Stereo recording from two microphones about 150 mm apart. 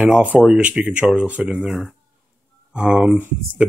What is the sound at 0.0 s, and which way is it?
Speech, 10° right (ahead or behind).